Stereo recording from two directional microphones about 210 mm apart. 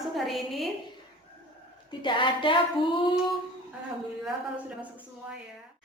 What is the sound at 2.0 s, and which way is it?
Speech, 20° left (ahead or behind).